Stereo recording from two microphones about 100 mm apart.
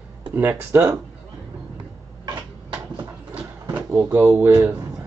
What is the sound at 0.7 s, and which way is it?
Speech, 30° right (ahead or behind).